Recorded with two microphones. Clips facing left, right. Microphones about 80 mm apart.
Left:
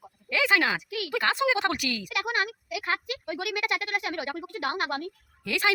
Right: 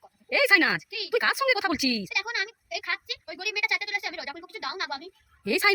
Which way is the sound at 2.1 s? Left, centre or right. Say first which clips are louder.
Left 4 dB; left.